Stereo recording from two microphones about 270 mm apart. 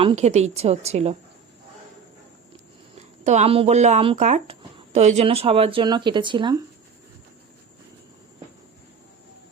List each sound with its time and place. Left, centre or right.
0.0 s speech: right
3.2 s speech: right